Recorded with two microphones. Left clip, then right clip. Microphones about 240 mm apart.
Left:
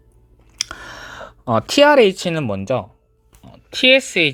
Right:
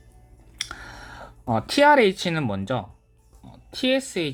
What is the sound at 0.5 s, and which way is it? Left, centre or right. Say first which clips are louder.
Speech: left 6 dB; left.